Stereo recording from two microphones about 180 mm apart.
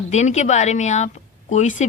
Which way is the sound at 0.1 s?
40° left (ahead or behind).